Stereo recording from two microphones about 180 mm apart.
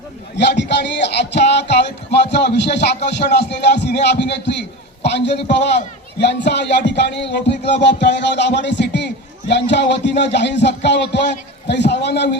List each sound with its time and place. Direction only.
0.3 s speech: 75° left (ahead or behind)